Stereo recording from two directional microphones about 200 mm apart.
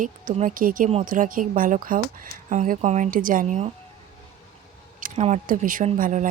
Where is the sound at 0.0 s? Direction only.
40° right (ahead or behind).